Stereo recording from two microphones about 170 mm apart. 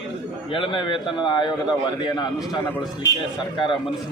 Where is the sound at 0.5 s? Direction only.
30° left (ahead or behind).